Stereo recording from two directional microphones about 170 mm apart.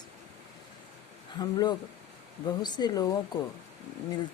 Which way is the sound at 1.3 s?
25° left (ahead or behind).